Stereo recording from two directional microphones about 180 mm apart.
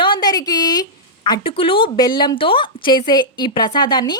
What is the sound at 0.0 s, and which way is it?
A woman's voice, 25° left (ahead or behind).